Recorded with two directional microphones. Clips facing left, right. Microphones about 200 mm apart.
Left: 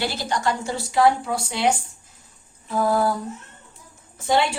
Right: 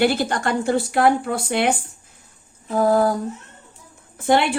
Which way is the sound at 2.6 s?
45° right (ahead or behind).